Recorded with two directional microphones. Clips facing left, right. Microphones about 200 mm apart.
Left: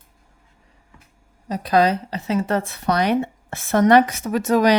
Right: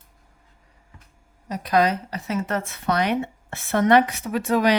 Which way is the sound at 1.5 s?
30° left (ahead or behind).